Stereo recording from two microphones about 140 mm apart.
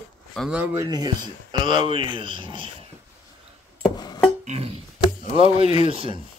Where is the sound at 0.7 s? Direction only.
30° right (ahead or behind).